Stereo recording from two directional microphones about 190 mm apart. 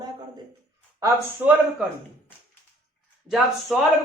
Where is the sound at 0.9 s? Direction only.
20° right (ahead or behind).